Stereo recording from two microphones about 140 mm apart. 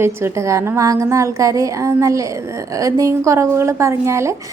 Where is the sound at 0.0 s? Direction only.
20° right (ahead or behind).